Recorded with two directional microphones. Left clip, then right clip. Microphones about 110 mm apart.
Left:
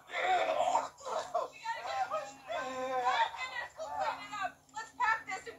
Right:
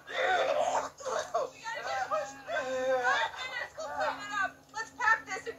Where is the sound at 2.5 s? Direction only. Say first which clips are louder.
Right 6 dB; 30° right (ahead or behind).